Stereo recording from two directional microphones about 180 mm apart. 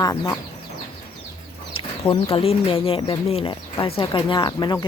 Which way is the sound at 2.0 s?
20° left (ahead or behind).